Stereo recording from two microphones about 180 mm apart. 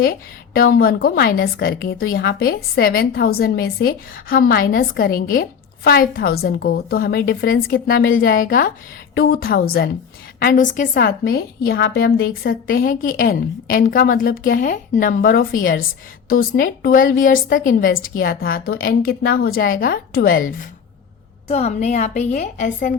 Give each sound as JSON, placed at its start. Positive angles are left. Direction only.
{"t": 0.0, "sound": "a woman's voice", "side_deg": 55}
{"t": 21.4, "sound": "a woman's voice", "side_deg": 35}